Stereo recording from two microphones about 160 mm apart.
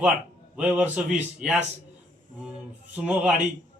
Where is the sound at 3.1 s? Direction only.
5° right (ahead or behind).